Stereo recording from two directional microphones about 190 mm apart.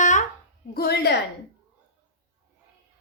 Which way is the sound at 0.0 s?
40° left (ahead or behind).